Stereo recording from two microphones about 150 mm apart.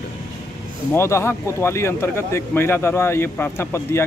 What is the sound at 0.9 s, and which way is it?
Speech, 15° left (ahead or behind).